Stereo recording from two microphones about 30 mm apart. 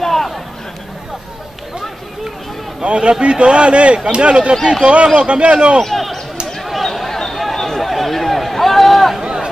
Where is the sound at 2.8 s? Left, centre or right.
Right.